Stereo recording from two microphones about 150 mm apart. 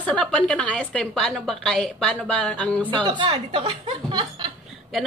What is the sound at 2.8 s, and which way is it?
Speech, 30° right (ahead or behind).